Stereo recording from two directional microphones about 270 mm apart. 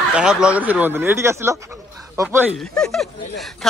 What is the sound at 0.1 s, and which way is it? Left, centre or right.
A man's voice, centre.